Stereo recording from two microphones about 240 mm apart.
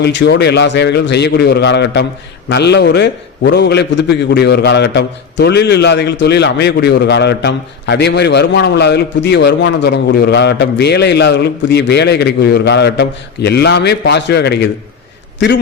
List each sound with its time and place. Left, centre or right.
0.0 s a man's voice: left